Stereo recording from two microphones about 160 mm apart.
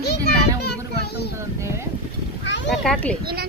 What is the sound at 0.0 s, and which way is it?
Children playing, 90° left.